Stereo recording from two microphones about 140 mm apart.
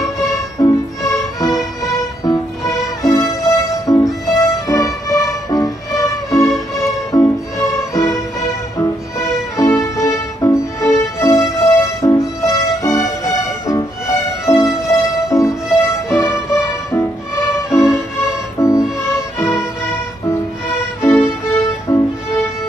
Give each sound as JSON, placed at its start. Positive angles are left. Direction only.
{"t": 0.3, "sound": "music", "side_deg": 25}
{"t": 17.8, "sound": "music", "side_deg": -5}
{"t": 18.6, "sound": "music", "side_deg": 20}